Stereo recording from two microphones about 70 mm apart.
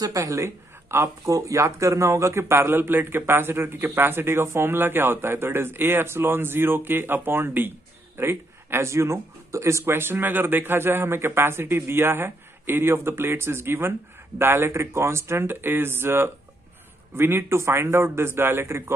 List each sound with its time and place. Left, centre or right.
0.0 s speech: right